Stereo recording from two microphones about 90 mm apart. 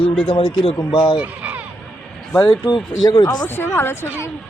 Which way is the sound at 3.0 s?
50° left (ahead or behind).